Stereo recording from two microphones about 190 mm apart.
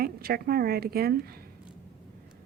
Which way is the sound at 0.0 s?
50° right (ahead or behind).